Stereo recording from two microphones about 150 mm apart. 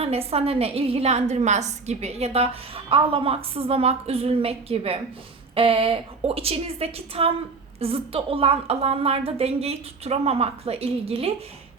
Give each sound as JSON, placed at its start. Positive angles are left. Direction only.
{"t": 0.0, "sound": "a woman's voice", "side_deg": -40}